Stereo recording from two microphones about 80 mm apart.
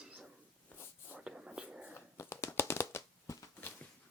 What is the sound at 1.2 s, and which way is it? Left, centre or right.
Whispering, centre.